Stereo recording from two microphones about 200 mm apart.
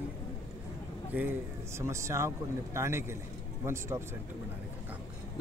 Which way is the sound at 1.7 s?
15° right (ahead or behind).